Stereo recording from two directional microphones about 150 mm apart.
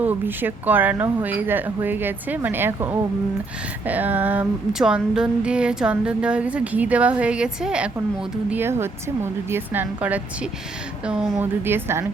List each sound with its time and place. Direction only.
0.0 s female singing: 10° right (ahead or behind)